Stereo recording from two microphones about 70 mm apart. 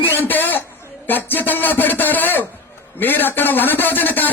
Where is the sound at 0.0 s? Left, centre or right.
Left.